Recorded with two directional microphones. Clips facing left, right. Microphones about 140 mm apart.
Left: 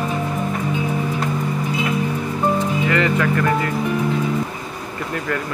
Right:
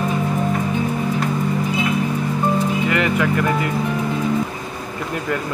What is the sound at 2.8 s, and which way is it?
Speech, 15° right (ahead or behind).